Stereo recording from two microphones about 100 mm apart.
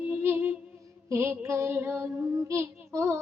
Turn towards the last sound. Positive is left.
turn(degrees=-25)  # may be behind; listen again after turning